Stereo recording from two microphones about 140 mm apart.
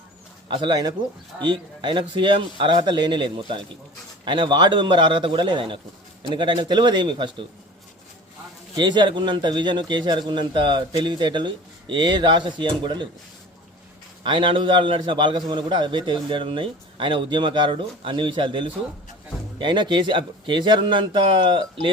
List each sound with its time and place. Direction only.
0.5 s a man's voice: 30° right (ahead or behind)
8.7 s a man's voice: 30° right (ahead or behind)
14.3 s a man's voice: 35° right (ahead or behind)